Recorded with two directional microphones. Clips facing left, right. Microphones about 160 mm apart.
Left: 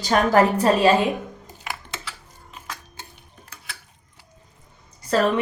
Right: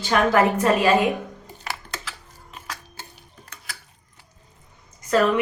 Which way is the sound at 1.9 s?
Centre (ahead or behind).